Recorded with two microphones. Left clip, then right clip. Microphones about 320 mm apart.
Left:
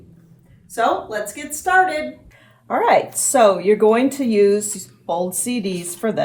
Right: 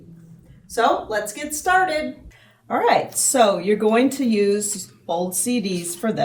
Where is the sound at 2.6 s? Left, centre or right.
Centre.